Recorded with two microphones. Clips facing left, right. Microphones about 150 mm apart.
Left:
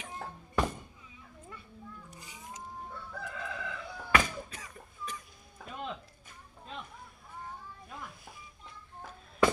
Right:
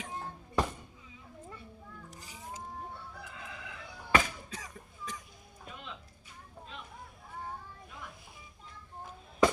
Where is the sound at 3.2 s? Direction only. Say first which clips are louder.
Left 7 dB; 65° left (ahead or behind).